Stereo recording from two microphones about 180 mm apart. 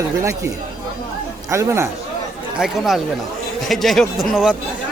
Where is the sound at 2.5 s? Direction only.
Centre (ahead or behind).